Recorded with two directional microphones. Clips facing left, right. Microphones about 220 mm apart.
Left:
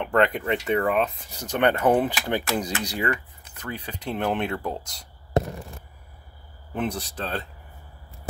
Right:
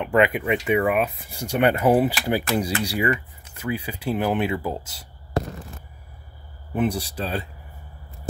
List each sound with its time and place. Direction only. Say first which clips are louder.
0.0 s speech: right 2 dB; 5° right (ahead or behind)
5.4 s fireworks: left 2 dB; 20° left (ahead or behind)
6.7 s speech: right 5 dB; 10° right (ahead or behind)